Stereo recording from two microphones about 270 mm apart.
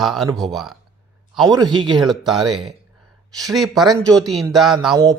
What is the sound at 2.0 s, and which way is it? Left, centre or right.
Speech, centre.